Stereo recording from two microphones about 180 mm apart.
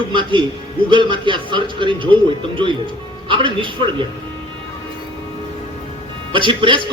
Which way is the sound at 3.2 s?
30° right (ahead or behind).